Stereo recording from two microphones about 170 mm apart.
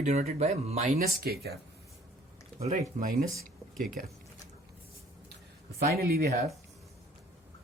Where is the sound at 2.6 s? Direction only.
50° right (ahead or behind).